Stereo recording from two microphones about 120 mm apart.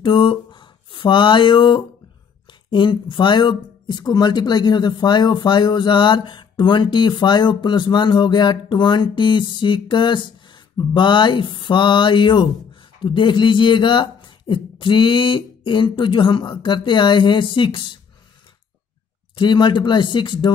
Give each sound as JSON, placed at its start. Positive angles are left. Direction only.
{"t": 0.0, "sound": "speech", "side_deg": 45}
{"t": 19.3, "sound": "speech", "side_deg": 40}